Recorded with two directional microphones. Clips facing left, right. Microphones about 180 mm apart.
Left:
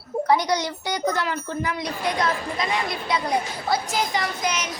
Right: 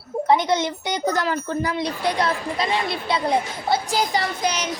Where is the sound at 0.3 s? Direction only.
25° right (ahead or behind).